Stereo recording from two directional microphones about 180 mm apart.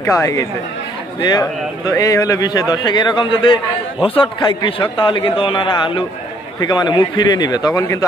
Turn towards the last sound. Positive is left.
turn(degrees=20)  # may be behind; listen again after turning